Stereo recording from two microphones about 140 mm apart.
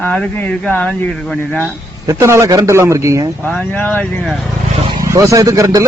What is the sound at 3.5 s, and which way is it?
Speech, 10° left (ahead or behind).